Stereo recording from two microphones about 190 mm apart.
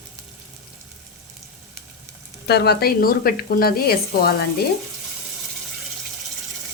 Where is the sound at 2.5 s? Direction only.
60° left (ahead or behind).